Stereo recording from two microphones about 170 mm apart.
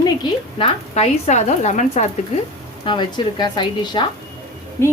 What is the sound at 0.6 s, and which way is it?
A woman's voice, 40° left (ahead or behind).